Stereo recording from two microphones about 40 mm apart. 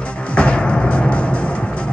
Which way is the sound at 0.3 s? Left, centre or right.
Left.